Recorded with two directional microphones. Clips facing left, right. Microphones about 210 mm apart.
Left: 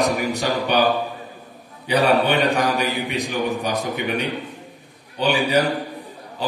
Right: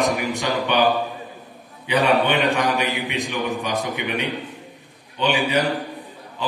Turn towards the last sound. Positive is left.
turn(degrees=40)  # may be behind; listen again after turning